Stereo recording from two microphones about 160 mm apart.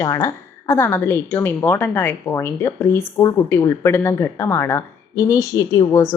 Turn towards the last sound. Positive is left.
turn(degrees=20)  # may be behind; listen again after turning